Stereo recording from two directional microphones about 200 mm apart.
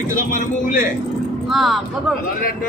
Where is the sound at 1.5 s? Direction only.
Centre (ahead or behind).